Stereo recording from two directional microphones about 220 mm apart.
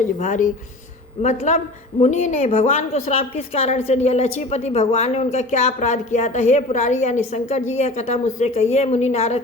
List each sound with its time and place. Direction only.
0.0 s a woman's voice: 35° left (ahead or behind)